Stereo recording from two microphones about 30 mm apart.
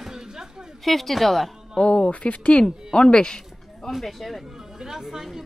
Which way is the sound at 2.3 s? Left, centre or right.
Left.